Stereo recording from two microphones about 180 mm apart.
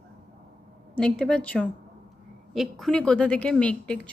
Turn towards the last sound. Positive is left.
turn(degrees=5)  # may be behind; listen again after turning